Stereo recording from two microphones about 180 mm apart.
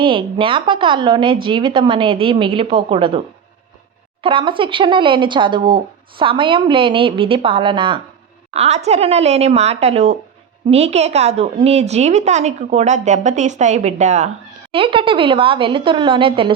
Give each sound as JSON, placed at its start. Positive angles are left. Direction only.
{"t": 0.0, "sound": "speech", "side_deg": -30}
{"t": 8.5, "sound": "a woman's voice", "side_deg": -40}
{"t": 14.7, "sound": "speech", "side_deg": -30}